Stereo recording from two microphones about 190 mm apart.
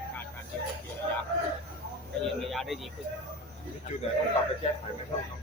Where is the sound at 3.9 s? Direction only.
40° left (ahead or behind).